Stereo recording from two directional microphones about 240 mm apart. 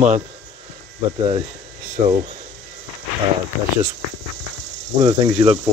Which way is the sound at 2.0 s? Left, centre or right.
Right.